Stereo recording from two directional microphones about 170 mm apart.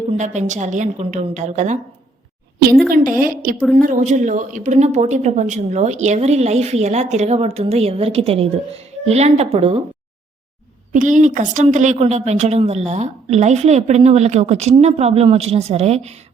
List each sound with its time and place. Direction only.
0.1 s a woman's voice: 45° right (ahead or behind)
2.9 s a woman's voice: 55° right (ahead or behind); by 9.8 s 35° right (ahead or behind)
10.9 s a woman's voice: 50° right (ahead or behind)